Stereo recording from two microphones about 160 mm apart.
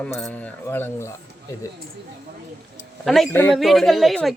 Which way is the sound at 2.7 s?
Centre (ahead or behind).